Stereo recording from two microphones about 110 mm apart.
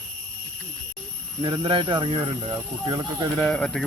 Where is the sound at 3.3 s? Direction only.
5° left (ahead or behind).